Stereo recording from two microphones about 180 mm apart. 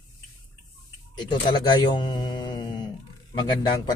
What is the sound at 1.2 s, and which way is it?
Speech, 25° left (ahead or behind).